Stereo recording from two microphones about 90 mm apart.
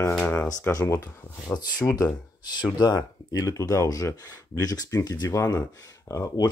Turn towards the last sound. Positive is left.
turn(degrees=45)  # may be behind; listen again after turning